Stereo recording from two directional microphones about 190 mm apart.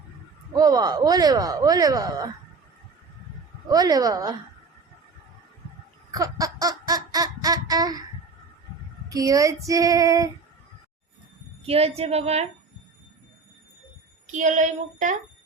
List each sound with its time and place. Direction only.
0.5 s speech: 20° right (ahead or behind)
3.7 s speech: 20° right (ahead or behind)
6.1 s baby laughter: 20° right (ahead or behind)
9.0 s female singing: 20° right (ahead or behind)
11.6 s a woman's voice: 30° right (ahead or behind)
14.3 s a woman's voice: 40° right (ahead or behind)